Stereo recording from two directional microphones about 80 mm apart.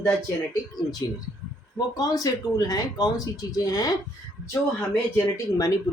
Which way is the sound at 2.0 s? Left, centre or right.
Left.